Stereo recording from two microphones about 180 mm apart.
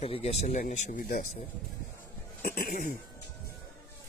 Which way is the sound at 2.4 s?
50° left (ahead or behind).